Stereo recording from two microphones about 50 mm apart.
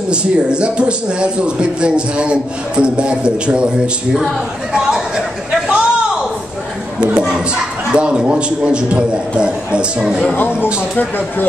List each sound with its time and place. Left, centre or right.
0.1 s a man's voice: right
4.7 s chatter: centre
7.2 s a man's voice: centre
10.6 s speech: left